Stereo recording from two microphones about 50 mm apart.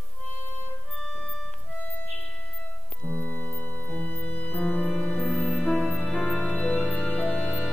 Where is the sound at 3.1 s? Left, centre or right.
Left.